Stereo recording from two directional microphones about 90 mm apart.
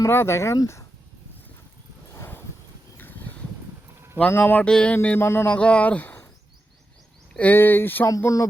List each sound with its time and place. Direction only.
0.0 s speech: 30° left (ahead or behind)
2.1 s a sound: 25° left (ahead or behind)
4.3 s speech: 20° left (ahead or behind)
5.0 s speech: 25° left (ahead or behind)
5.5 s speech: 15° left (ahead or behind)
7.3 s speech: 20° left (ahead or behind)
8.0 s speech: 35° left (ahead or behind)